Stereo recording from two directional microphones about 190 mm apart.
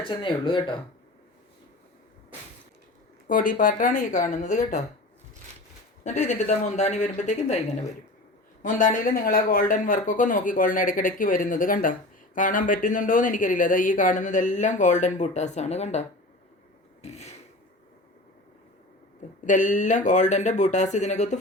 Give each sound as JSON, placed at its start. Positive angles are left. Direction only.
{"t": 0.0, "sound": "speech", "side_deg": 25}
{"t": 3.2, "sound": "speech", "side_deg": 45}
{"t": 6.0, "sound": "speech", "side_deg": 40}
{"t": 8.6, "sound": "speech", "side_deg": 45}
{"t": 17.0, "sound": "a sound", "side_deg": 35}
{"t": 19.5, "sound": "speech", "side_deg": 40}